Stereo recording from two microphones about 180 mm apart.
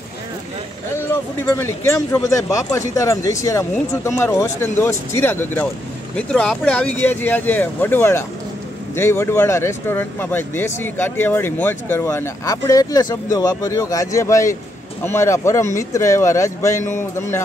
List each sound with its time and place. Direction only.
1.5 s speech: 15° left (ahead or behind)